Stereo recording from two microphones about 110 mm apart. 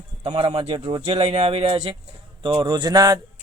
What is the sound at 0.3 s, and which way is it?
Speech, 50° right (ahead or behind).